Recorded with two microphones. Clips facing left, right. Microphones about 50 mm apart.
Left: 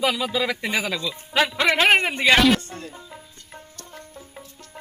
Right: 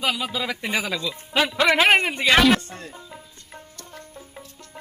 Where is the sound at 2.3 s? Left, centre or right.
Centre.